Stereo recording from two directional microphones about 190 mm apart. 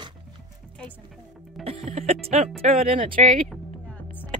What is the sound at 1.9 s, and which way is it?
Speech, 35° right (ahead or behind).